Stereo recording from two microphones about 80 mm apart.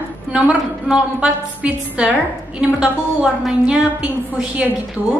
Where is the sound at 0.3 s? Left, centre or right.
Centre.